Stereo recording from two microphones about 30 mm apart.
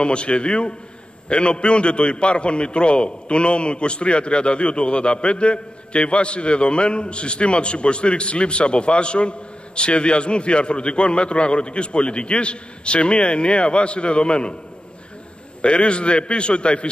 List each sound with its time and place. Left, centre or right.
0.0 s a man's voice: left
15.6 s a man's voice: left